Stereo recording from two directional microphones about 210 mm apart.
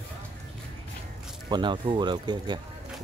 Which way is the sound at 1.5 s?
20° right (ahead or behind).